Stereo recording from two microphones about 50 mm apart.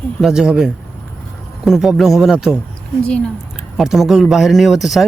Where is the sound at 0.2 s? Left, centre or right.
Centre.